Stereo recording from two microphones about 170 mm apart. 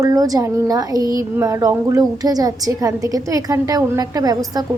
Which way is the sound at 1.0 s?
25° left (ahead or behind).